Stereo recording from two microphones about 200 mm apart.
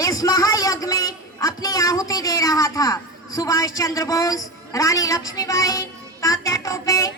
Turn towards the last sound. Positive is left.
turn(degrees=15)  # may be behind; listen again after turning